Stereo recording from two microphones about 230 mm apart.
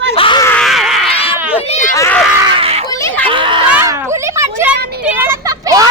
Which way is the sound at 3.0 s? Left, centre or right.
Centre.